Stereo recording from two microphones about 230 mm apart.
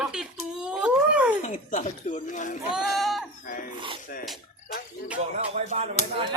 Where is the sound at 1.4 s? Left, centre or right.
Left.